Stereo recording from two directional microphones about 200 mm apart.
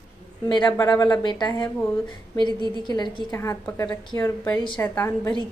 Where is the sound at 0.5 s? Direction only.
20° left (ahead or behind).